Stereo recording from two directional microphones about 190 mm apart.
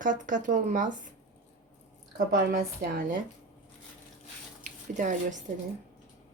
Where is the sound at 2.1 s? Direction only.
50° right (ahead or behind).